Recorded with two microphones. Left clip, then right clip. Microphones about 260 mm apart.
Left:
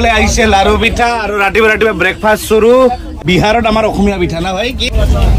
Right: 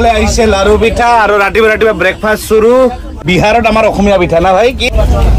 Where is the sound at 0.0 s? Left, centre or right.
Left.